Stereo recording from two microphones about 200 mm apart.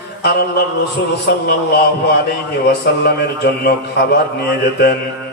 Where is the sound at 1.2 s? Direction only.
55° left (ahead or behind).